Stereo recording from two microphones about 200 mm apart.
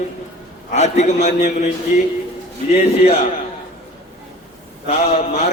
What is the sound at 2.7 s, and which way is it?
Speech, 30° left (ahead or behind).